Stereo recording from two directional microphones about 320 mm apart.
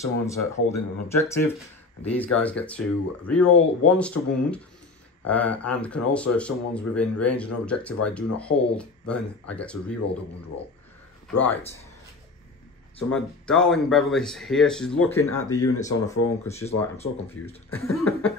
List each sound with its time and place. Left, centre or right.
0.0 s speech: centre
4.2 s speech: left
5.2 s speech: centre
11.3 s speech: centre
13.1 s speech: centre
17.6 s speech: centre